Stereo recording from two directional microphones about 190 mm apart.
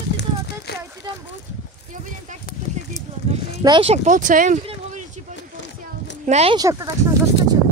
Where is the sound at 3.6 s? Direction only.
25° right (ahead or behind); by 4.6 s 45° right (ahead or behind).